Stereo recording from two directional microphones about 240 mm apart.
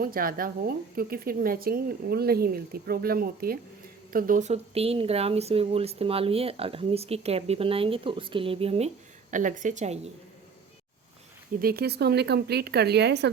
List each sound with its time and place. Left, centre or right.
0.0 s speech: right
11.6 s speech: right